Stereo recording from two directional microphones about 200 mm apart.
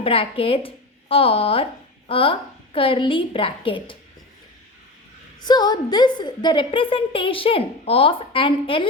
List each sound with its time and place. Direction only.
0.0 s a woman's voice: 30° left (ahead or behind)
5.4 s a woman's voice: 20° left (ahead or behind)